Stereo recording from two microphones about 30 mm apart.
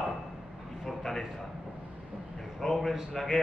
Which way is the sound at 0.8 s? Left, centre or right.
Centre.